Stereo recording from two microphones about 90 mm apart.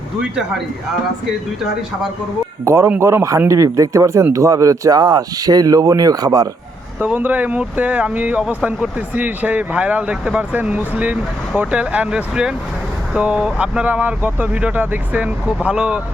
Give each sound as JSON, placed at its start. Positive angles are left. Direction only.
{"t": 2.6, "sound": "speech", "side_deg": -30}
{"t": 7.0, "sound": "speech", "side_deg": -20}